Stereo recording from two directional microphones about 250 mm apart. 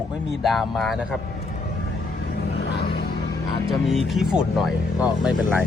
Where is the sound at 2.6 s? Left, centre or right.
Left.